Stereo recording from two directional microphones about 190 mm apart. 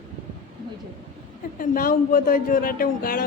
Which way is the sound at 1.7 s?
45° left (ahead or behind).